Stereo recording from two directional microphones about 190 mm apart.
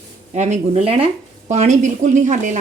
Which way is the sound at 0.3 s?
35° right (ahead or behind).